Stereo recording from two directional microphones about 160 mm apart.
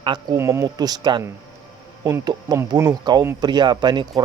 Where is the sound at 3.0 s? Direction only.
25° right (ahead or behind).